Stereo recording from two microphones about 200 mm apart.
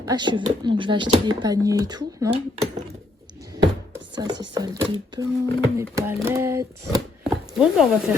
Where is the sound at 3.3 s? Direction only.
20° right (ahead or behind).